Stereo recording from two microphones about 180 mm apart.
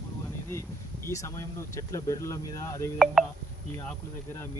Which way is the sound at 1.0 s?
15° left (ahead or behind).